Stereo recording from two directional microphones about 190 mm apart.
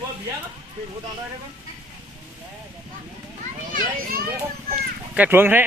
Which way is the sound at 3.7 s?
45° right (ahead or behind).